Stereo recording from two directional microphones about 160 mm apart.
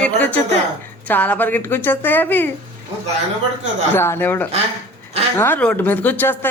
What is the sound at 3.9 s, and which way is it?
Speech, 15° left (ahead or behind).